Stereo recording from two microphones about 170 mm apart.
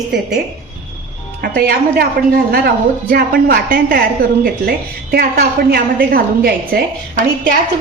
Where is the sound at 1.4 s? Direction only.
60° right (ahead or behind).